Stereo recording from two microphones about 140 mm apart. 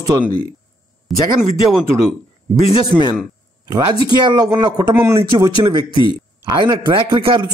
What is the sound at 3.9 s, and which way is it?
A man's voice, 30° right (ahead or behind).